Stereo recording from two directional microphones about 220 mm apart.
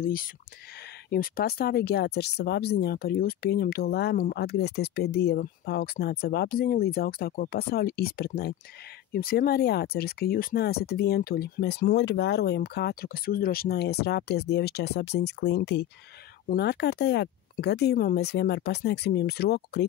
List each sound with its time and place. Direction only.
0.0 s speech: 40° left (ahead or behind)